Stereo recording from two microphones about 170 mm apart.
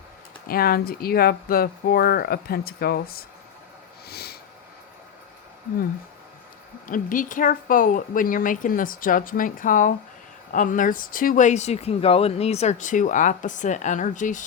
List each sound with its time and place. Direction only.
0.4 s speech: 60° left (ahead or behind)
4.1 s a sound: 70° left (ahead or behind)
6.8 s speech: 50° left (ahead or behind)